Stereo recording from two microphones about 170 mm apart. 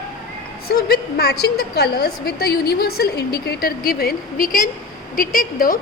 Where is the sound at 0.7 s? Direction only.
65° left (ahead or behind).